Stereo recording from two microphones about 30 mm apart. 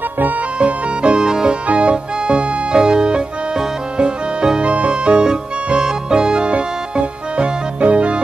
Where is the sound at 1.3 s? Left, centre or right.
Right.